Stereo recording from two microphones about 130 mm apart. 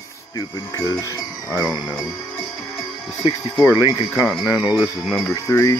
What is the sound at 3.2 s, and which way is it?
Speech, 25° left (ahead or behind).